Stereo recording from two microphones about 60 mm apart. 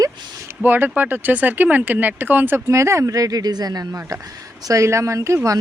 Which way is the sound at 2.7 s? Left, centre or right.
Right.